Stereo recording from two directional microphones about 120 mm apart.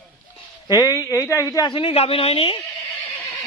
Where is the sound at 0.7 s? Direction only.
30° left (ahead or behind).